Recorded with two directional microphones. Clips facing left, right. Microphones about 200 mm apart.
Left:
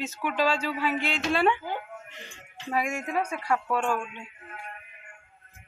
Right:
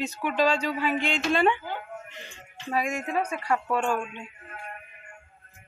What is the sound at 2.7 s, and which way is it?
Speech, 10° left (ahead or behind).